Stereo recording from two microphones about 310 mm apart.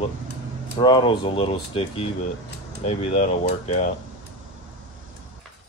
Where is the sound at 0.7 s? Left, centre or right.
Centre.